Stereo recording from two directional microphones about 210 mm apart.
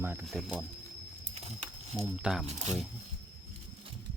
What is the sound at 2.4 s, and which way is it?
Speech, 30° right (ahead or behind).